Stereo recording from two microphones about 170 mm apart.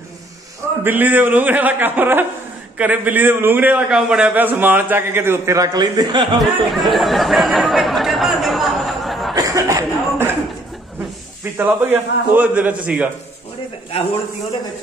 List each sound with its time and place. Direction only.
0.8 s a man's voice: 10° right (ahead or behind)
6.7 s speech: centre (ahead or behind)
9.3 s cough: 20° right (ahead or behind)
11.5 s a man's voice: 10° right (ahead or behind)
13.9 s a man's voice: 35° left (ahead or behind)